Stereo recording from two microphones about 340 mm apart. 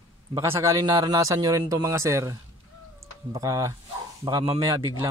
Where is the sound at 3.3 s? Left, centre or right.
Centre.